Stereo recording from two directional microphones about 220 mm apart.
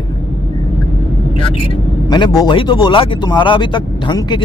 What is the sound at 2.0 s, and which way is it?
Speech, 20° left (ahead or behind).